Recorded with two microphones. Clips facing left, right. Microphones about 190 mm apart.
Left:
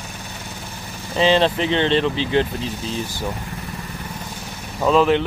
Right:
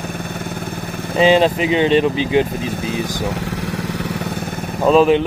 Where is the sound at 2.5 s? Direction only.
55° right (ahead or behind); by 4.1 s 80° right.